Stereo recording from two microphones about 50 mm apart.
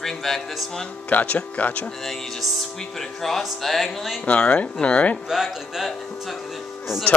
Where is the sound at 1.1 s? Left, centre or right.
Left.